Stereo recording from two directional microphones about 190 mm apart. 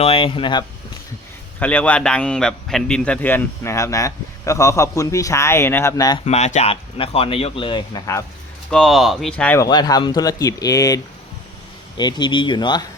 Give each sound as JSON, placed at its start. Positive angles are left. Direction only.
{"t": 0.0, "sound": "speech", "side_deg": 30}
{"t": 1.5, "sound": "a man's voice", "side_deg": 5}
{"t": 6.2, "sound": "speech", "side_deg": 35}
{"t": 8.7, "sound": "speech", "side_deg": 0}
{"t": 9.6, "sound": "speech", "side_deg": 20}